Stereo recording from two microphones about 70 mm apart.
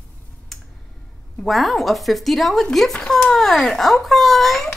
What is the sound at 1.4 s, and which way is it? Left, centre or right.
A child's voice, centre.